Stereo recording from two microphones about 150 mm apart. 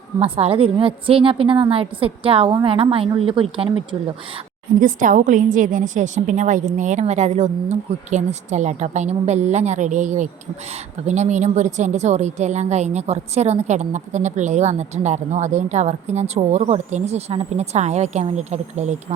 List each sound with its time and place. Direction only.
0.2 s a woman's voice: 40° right (ahead or behind)
4.8 s a woman's voice: 60° right (ahead or behind)